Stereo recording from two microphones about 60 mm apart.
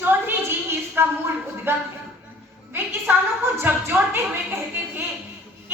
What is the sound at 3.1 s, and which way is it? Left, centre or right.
Speech, right.